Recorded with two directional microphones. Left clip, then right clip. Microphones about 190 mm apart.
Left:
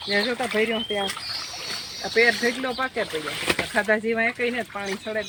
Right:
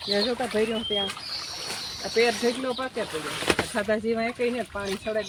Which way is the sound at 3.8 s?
20° left (ahead or behind).